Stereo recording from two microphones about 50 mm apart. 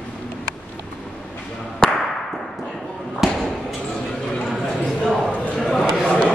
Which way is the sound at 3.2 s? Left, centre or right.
Centre.